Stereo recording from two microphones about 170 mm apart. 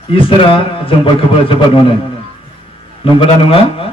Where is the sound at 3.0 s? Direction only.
30° left (ahead or behind).